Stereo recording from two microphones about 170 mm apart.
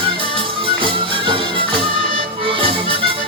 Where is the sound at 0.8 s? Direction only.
30° right (ahead or behind).